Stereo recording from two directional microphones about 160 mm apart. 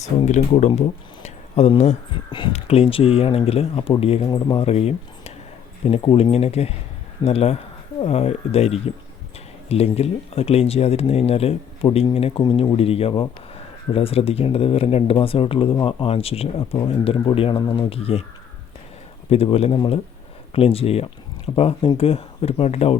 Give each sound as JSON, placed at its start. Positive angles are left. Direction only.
{"t": 0.0, "sound": "speech", "side_deg": 45}
{"t": 19.3, "sound": "speech", "side_deg": 40}